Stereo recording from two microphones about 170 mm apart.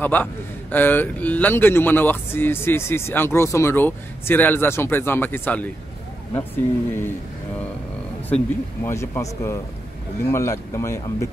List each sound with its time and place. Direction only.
0.0 s speech: 10° left (ahead or behind)
8.8 s speech: 15° left (ahead or behind)